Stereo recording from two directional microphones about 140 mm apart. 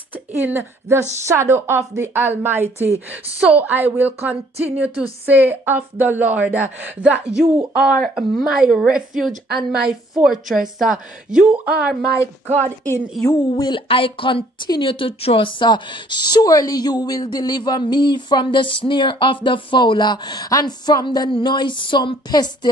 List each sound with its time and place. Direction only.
0.1 s a woman's voice: 15° right (ahead or behind)
9.3 s a woman's voice: 90° right
9.7 s a woman's voice: 5° right (ahead or behind)
13.3 s speech: 30° left (ahead or behind)